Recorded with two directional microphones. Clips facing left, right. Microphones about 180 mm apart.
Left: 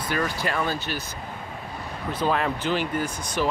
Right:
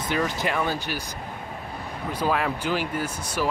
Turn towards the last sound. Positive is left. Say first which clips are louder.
# left 1 dB
turn(degrees=-10)  # may be behind; listen again after turning